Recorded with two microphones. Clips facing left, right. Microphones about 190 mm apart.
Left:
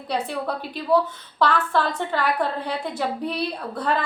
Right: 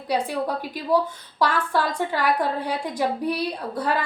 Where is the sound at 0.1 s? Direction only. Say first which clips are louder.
Right 2 dB; 10° right (ahead or behind).